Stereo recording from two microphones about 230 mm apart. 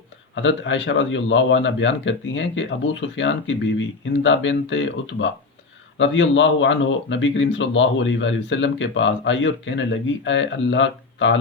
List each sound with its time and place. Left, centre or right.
0.3 s a man's voice: left